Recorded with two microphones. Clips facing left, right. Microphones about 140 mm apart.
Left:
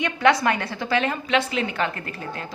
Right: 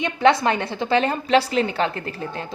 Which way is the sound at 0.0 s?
25° right (ahead or behind).